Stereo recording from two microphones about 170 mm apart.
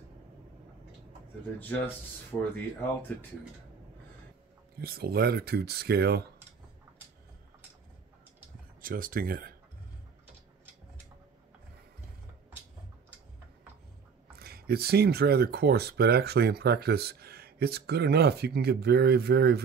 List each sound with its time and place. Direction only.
2.5 s speech: 10° left (ahead or behind)
4.7 s speech: 65° right (ahead or behind)
8.8 s speech: 55° right (ahead or behind)
14.4 s speech: 65° right (ahead or behind)